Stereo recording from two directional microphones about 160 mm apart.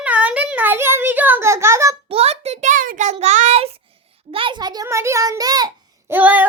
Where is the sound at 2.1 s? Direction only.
40° right (ahead or behind); by 5.7 s 25° right (ahead or behind).